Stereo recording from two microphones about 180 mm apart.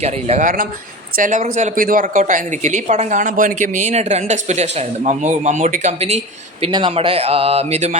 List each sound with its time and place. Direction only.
0.0 s speech: 40° right (ahead or behind)